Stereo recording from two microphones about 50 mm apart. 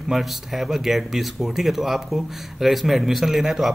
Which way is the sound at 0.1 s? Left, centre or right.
Centre.